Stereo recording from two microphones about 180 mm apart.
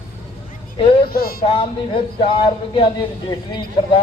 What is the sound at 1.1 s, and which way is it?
Speech, 60° left (ahead or behind).